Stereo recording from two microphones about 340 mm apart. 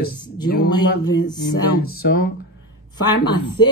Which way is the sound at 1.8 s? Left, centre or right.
Left.